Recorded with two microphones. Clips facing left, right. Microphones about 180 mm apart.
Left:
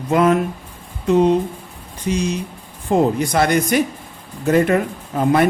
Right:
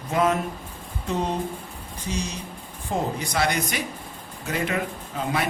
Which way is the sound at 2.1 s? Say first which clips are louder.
Left 10 dB; 70° left (ahead or behind).